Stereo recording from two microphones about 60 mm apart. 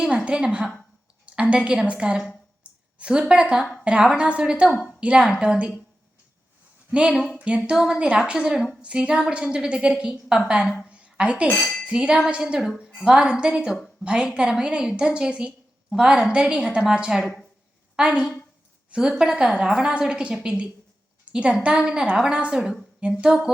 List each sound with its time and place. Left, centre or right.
0.3 s a woman's voice: centre
4.7 s a woman's voice: left
4.9 s a woman's voice: centre
6.9 s a woman's voice: centre
10.8 s a sound: centre
11.9 s a woman's voice: centre